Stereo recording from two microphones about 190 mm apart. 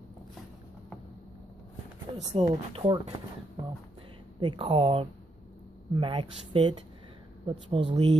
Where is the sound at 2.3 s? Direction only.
30° right (ahead or behind).